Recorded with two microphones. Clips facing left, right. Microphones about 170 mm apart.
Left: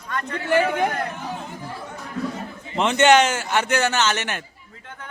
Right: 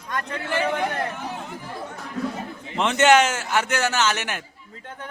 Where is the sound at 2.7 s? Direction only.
Centre (ahead or behind).